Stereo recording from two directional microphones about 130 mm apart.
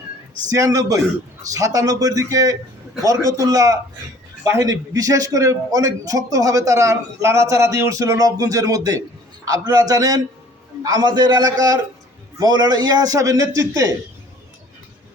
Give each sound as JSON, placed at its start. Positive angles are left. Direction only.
{"t": 0.5, "sound": "a man's voice", "side_deg": -25}